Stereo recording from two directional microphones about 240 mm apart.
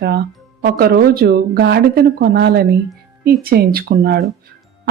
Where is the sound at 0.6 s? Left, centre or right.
Right.